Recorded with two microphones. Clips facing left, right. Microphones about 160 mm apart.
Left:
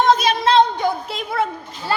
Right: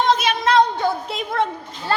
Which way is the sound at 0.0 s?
40° left (ahead or behind).